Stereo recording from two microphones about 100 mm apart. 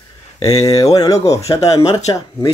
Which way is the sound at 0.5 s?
35° left (ahead or behind).